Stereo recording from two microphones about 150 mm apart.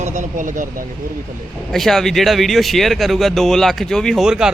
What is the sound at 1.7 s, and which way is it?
Speech, centre (ahead or behind).